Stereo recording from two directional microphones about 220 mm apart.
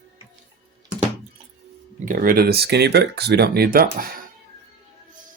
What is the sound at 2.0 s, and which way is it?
Speech, 40° right (ahead or behind).